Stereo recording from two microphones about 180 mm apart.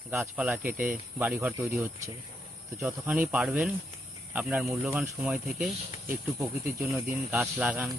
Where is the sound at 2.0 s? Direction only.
15° right (ahead or behind).